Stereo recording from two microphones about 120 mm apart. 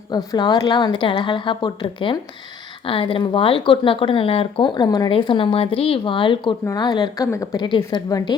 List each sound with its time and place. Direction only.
0.3 s a woman's voice: 35° left (ahead or behind)